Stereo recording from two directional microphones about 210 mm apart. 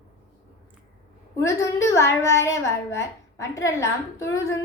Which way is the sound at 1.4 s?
15° left (ahead or behind).